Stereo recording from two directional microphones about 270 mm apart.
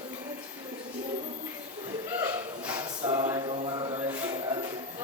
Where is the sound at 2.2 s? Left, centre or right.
Centre.